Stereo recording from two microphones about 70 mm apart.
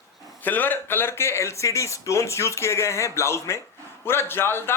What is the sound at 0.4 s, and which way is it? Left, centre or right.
A man's voice, left.